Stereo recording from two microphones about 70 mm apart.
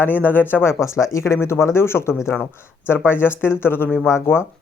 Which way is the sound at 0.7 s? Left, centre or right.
Left.